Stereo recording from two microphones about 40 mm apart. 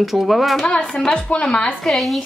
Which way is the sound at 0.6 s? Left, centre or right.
Left.